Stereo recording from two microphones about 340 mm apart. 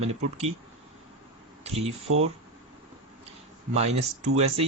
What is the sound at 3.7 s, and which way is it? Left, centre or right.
Speech, centre.